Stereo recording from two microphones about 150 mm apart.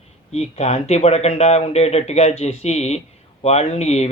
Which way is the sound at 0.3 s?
45° left (ahead or behind).